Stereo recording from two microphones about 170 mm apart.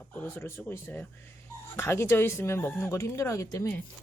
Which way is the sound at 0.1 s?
10° left (ahead or behind).